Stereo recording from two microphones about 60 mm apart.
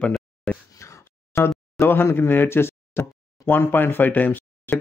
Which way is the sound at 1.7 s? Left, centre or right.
Left.